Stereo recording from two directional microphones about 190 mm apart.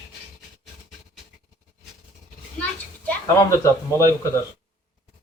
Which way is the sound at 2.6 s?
10° left (ahead or behind).